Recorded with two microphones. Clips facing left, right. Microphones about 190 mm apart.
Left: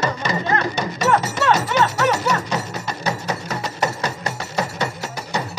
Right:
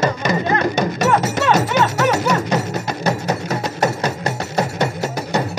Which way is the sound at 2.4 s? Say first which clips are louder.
Right 5 dB; 45° right (ahead or behind).